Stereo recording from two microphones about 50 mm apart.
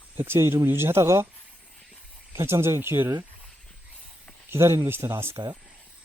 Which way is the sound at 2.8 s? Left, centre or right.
Right.